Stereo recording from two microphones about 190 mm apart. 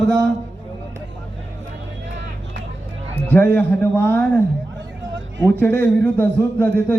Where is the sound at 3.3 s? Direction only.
10° left (ahead or behind).